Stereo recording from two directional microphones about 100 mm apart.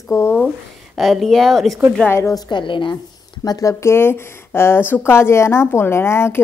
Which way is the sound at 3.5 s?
35° left (ahead or behind).